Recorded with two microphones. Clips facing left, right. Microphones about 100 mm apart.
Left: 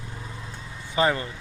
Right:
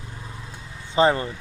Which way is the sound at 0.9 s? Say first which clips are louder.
Right 4 dB; 30° right (ahead or behind).